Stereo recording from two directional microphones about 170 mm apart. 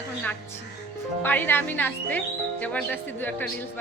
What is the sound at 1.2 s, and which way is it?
Speech, 10° left (ahead or behind).